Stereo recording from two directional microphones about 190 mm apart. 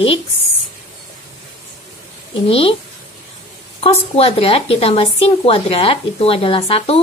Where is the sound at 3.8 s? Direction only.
30° left (ahead or behind).